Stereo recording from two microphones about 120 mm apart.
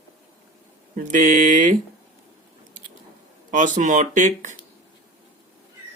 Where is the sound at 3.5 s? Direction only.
90° right.